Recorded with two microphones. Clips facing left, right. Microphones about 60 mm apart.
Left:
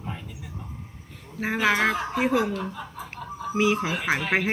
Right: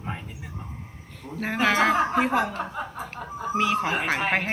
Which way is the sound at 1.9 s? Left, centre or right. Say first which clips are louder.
Right 2 dB; right.